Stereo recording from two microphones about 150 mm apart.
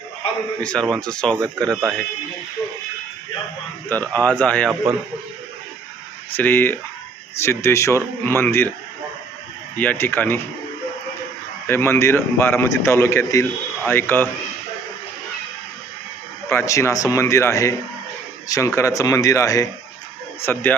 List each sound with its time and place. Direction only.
0.6 s speech: 5° left (ahead or behind)
3.8 s a man's voice: 10° left (ahead or behind)
6.3 s a man's voice: 15° left (ahead or behind)
9.7 s a man's voice: 10° left (ahead or behind)
11.6 s a man's voice: 15° left (ahead or behind)
16.5 s a man's voice: 20° left (ahead or behind)